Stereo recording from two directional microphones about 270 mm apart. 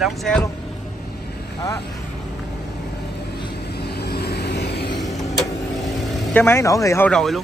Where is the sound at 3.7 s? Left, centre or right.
Left.